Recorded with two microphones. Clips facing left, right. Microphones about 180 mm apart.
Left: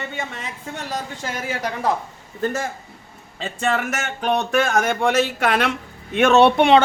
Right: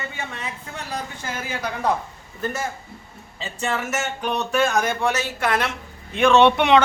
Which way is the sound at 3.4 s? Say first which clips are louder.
Left 4 dB; 55° left (ahead or behind).